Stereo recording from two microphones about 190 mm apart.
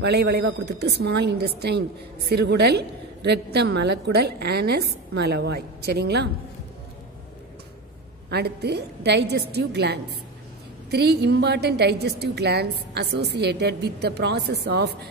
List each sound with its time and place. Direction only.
0.0 s a woman's voice: 60° right (ahead or behind)
8.3 s a woman's voice: 60° right (ahead or behind)